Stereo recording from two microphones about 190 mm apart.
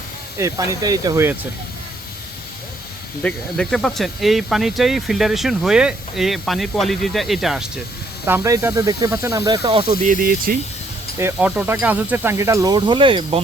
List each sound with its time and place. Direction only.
0.3 s speech: 15° right (ahead or behind)
3.2 s speech: 5° left (ahead or behind)
8.3 s speech: 15° right (ahead or behind)
10.0 s speech: 45° right (ahead or behind)
11.2 s speech: 10° right (ahead or behind); by 13.4 s 25° right (ahead or behind)